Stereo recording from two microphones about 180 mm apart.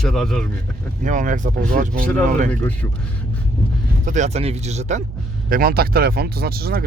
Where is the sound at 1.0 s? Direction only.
45° right (ahead or behind).